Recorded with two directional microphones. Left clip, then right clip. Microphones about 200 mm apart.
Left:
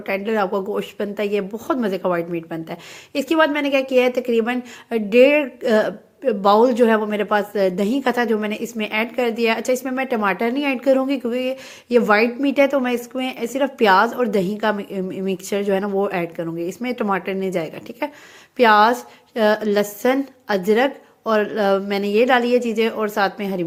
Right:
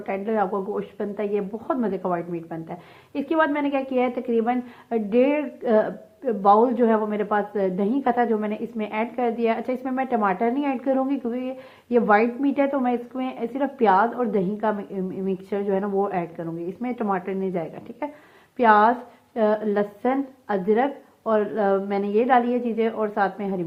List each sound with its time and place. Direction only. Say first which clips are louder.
0.0 s speech: left 3 dB; 25° left (ahead or behind)